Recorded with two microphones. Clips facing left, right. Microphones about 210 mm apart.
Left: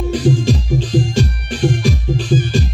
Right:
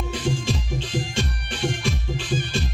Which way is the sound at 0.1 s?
40° left (ahead or behind).